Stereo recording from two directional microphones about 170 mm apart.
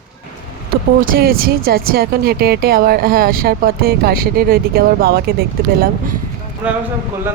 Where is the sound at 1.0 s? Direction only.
60° right (ahead or behind).